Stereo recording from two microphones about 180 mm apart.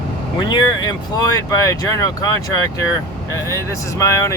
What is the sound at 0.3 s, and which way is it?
Speech, 25° left (ahead or behind).